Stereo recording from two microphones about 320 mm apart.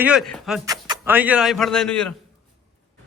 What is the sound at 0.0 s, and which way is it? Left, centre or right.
Speech, centre.